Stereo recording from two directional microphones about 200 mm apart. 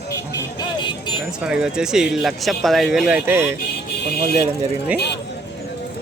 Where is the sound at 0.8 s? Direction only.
25° left (ahead or behind).